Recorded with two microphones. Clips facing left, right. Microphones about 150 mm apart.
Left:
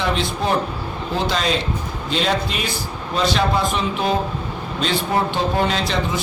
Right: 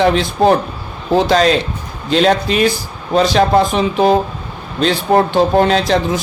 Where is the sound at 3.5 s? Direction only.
45° right (ahead or behind).